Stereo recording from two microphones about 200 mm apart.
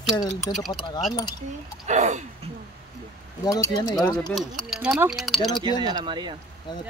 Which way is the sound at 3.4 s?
20° left (ahead or behind).